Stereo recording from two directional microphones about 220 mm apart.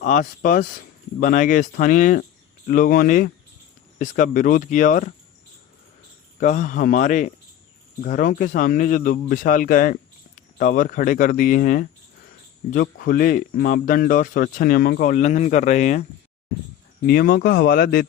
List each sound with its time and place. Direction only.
0.0 s speech: 35° left (ahead or behind)
6.4 s speech: 35° left (ahead or behind)
17.1 s speech: 45° left (ahead or behind)